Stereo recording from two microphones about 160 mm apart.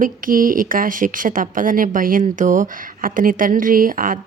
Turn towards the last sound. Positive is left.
turn(degrees=-60)  # may be behind; listen again after turning